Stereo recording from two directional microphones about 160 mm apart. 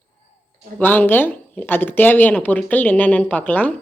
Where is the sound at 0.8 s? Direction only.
10° left (ahead or behind).